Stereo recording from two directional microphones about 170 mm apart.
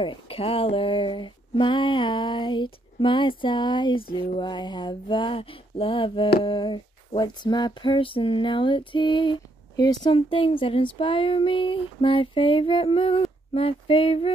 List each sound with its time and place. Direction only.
0.0 s speech: 30° left (ahead or behind)
10.1 s female singing: 30° left (ahead or behind)